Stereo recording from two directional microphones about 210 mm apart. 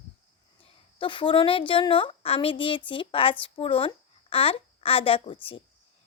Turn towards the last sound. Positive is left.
turn(degrees=25)  # may be behind; listen again after turning